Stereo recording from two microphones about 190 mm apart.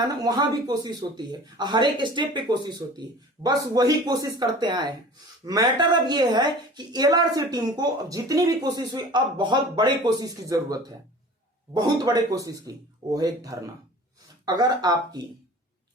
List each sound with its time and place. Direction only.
0.0 s speech: 20° right (ahead or behind)